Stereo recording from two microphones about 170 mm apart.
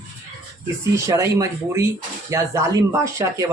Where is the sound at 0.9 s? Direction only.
15° right (ahead or behind).